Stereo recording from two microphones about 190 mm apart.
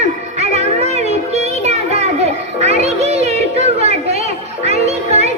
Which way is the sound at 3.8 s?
35° right (ahead or behind).